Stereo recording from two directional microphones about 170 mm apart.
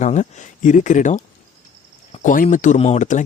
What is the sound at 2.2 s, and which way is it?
Speech, 50° left (ahead or behind).